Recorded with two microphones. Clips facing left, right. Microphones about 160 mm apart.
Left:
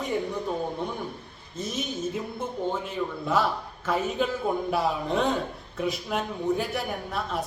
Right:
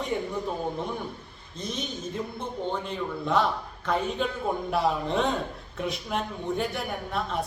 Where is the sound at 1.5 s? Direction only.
5° left (ahead or behind).